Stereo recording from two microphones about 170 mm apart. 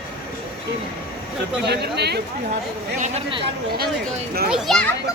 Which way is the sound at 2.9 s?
45° right (ahead or behind).